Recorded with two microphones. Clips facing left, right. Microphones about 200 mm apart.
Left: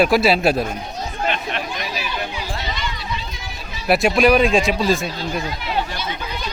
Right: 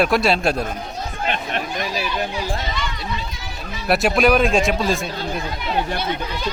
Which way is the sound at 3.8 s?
Centre (ahead or behind).